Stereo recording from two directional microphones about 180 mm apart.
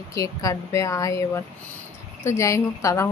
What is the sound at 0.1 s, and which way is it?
Speech, 20° left (ahead or behind).